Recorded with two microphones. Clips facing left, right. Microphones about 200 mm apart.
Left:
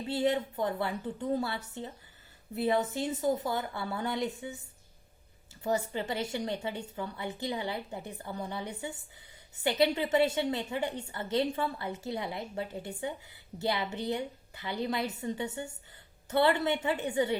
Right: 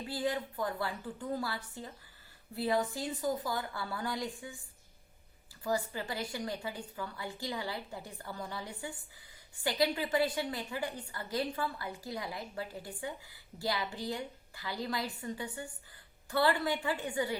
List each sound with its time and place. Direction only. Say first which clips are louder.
0.1 s a woman's voice: left 6 dB; 25° left (ahead or behind)
5.6 s a woman's voice: left 3 dB; 25° left (ahead or behind)